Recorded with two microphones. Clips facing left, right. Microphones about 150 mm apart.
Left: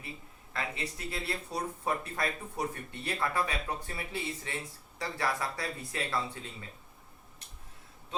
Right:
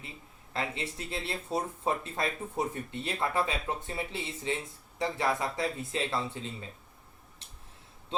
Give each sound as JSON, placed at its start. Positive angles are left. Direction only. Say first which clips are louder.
{"t": 0.5, "sound": "speech", "louder": "right 3 dB", "side_deg": -25}